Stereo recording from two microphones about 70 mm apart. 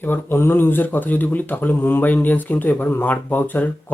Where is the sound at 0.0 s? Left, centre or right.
Left.